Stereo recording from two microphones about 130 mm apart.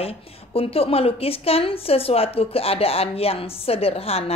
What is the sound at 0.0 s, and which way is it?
A woman's voice, 50° left (ahead or behind).